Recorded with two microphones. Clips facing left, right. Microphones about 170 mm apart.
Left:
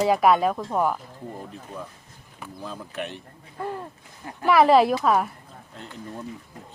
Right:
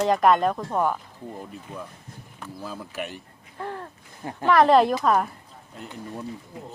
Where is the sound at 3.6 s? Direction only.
15° left (ahead or behind).